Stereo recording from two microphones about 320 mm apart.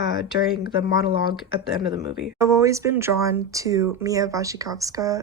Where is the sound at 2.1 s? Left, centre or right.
Centre.